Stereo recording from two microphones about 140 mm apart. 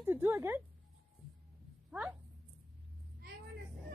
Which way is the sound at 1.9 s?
10° right (ahead or behind).